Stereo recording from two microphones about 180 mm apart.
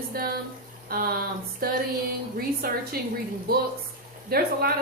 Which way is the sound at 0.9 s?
55° right (ahead or behind).